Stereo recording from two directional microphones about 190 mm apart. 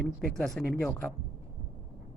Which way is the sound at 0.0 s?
Centre (ahead or behind).